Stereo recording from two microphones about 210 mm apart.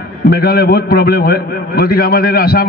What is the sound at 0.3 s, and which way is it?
A man's voice, 45° left (ahead or behind).